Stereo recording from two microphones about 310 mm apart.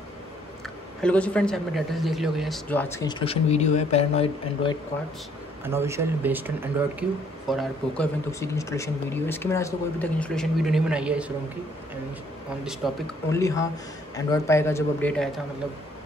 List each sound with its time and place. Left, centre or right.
1.0 s a man's voice: centre
5.6 s speech: centre
8.3 s speech: centre
12.6 s a man's voice: centre